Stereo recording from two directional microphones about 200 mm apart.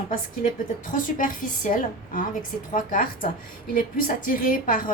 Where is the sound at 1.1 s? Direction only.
40° left (ahead or behind).